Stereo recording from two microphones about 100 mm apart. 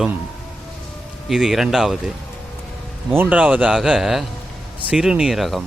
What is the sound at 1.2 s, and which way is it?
Speech, 5° right (ahead or behind).